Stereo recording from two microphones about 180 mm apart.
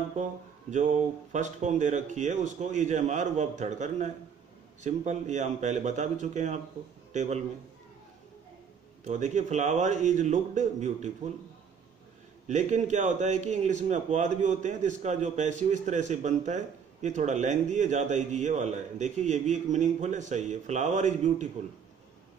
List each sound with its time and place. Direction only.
0.7 s a man's voice: 40° right (ahead or behind)
9.0 s a man's voice: 45° right (ahead or behind)
12.4 s a man's voice: 40° right (ahead or behind)